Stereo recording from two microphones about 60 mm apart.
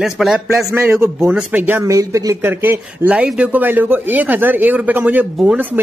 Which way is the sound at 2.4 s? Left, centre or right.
Right.